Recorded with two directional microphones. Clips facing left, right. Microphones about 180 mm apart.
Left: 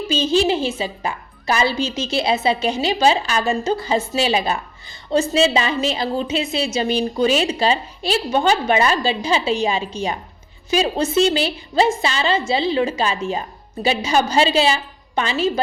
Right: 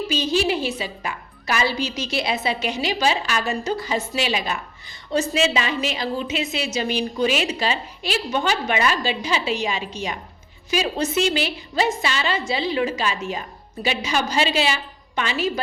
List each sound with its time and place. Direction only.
0.1 s a woman's voice: 25° left (ahead or behind)